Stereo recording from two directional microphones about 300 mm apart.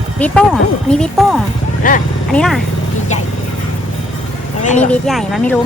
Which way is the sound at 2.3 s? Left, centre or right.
Centre.